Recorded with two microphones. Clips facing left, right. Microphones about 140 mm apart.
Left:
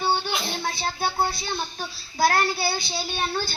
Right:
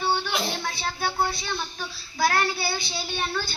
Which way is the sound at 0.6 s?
35° left (ahead or behind).